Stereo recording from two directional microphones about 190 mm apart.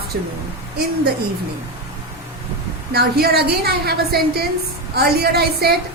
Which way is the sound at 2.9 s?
55° right (ahead or behind).